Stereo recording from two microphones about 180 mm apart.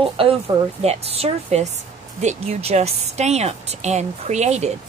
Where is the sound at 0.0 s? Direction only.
30° right (ahead or behind).